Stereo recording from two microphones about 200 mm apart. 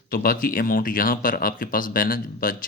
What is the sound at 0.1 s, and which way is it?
Speech, 50° left (ahead or behind).